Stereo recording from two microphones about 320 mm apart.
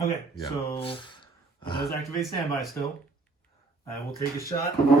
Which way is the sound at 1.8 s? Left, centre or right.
Centre.